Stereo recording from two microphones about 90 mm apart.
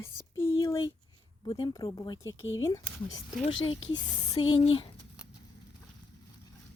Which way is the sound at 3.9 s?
55° left (ahead or behind).